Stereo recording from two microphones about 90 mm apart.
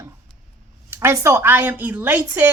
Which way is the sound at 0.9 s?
30° right (ahead or behind).